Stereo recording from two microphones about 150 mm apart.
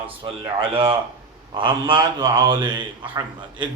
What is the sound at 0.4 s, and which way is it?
A man's voice, 35° right (ahead or behind).